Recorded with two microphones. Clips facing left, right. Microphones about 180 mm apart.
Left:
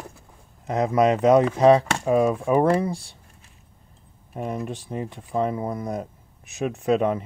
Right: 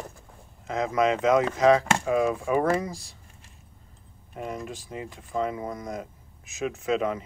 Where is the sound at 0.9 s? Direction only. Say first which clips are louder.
Left 5 dB; 35° left (ahead or behind).